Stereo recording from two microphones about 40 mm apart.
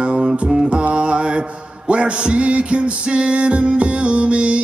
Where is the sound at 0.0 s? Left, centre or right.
Right.